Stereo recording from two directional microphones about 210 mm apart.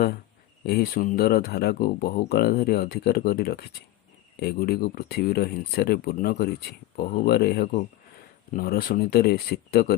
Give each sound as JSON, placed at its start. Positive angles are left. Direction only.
{"t": 0.6, "sound": "speech", "side_deg": 50}